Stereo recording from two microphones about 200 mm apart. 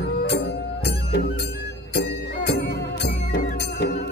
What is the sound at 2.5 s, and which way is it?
Music, 55° left (ahead or behind).